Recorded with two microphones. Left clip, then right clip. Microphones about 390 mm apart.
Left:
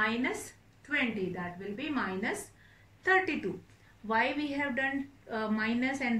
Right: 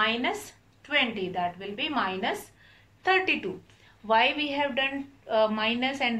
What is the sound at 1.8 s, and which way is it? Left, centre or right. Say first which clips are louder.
A woman's voice: right 7 dB; centre.